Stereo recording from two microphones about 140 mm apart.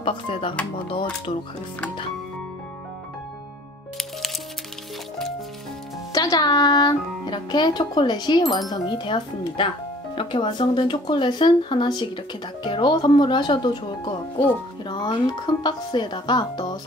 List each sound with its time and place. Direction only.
0.0 s speech: 40° left (ahead or behind)
6.1 s speech: 30° left (ahead or behind)